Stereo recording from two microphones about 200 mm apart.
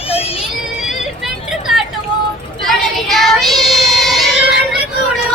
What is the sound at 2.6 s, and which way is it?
Child singing, centre (ahead or behind).